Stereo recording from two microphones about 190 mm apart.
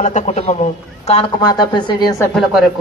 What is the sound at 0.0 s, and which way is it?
A woman's voice, 35° left (ahead or behind).